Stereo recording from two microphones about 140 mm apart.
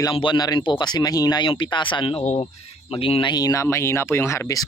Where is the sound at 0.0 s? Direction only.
35° left (ahead or behind).